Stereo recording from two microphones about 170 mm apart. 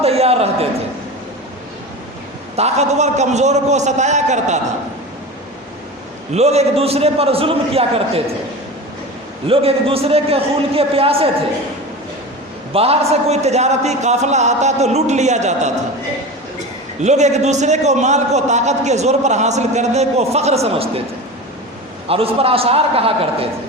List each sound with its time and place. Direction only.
0.0 s a sound: 35° right (ahead or behind)
2.6 s a man's voice: 40° right (ahead or behind)
6.3 s a man's voice: 40° right (ahead or behind)
9.5 s a man's voice: 35° right (ahead or behind)
12.7 s a man's voice: 35° right (ahead or behind)
17.0 s a man's voice: 40° right (ahead or behind)
22.1 s a man's voice: 35° right (ahead or behind)